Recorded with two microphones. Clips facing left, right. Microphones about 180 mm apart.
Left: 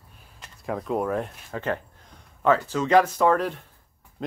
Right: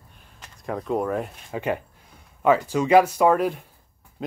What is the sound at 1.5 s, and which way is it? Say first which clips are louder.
Speech: right 2 dB; 10° right (ahead or behind).